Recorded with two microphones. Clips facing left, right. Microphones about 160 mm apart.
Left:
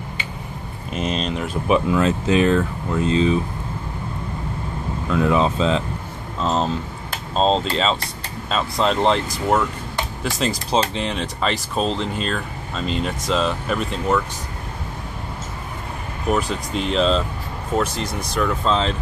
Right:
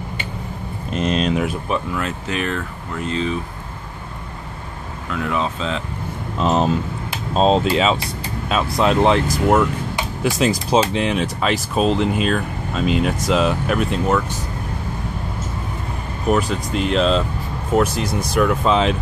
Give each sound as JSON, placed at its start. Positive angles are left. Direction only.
{"t": 0.9, "sound": "a sound", "side_deg": 0}
{"t": 2.0, "sound": "speech", "side_deg": 25}
{"t": 5.1, "sound": "speech", "side_deg": 25}
{"t": 6.4, "sound": "speech", "side_deg": -15}
{"t": 16.3, "sound": "speech", "side_deg": 0}